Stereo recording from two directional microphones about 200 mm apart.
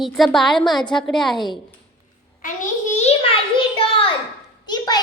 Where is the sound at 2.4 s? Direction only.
40° left (ahead or behind); by 5.0 s 20° left (ahead or behind).